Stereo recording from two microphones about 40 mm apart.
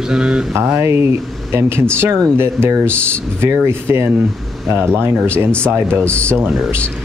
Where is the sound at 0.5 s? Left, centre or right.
Right.